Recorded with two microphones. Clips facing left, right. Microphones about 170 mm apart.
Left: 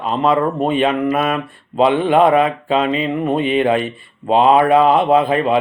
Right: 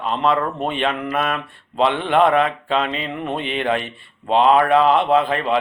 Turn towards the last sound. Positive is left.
turn(degrees=10)  # may be behind; listen again after turning